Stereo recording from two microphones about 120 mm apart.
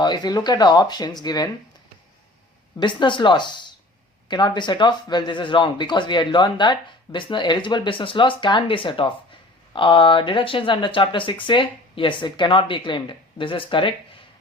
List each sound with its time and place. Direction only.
0.0 s speech: 35° left (ahead or behind)
2.8 s speech: 40° left (ahead or behind)